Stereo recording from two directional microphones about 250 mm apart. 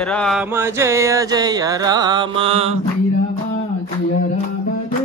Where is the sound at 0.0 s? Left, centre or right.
Centre; by 2.8 s right.